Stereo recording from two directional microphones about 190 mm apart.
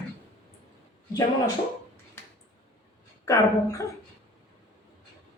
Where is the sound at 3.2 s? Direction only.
15° left (ahead or behind).